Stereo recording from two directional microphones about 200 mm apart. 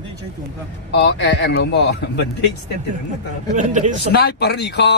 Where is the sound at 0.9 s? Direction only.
60° left (ahead or behind).